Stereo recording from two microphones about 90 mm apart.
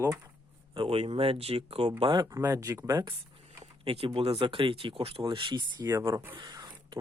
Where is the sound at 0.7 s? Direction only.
90° right.